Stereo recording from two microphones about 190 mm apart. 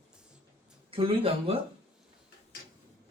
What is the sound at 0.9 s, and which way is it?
Speech, 30° right (ahead or behind).